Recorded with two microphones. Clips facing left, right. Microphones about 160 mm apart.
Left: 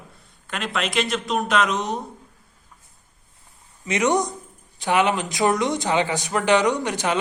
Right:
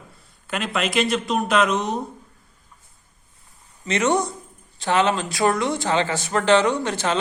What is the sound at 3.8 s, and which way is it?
Speech, 15° left (ahead or behind).